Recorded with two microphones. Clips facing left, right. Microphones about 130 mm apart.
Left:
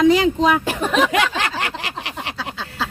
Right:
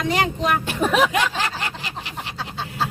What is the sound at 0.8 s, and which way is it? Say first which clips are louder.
Speech: even; 5° right (ahead or behind).